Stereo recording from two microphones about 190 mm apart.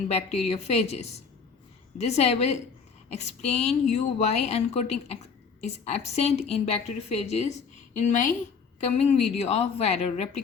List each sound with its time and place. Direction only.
0.1 s a woman's voice: 35° left (ahead or behind)